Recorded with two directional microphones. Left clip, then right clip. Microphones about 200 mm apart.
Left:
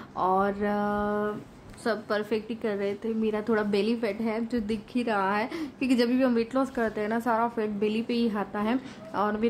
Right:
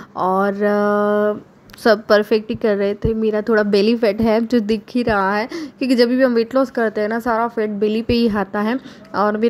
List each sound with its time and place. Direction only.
0.2 s a woman's voice: 25° right (ahead or behind)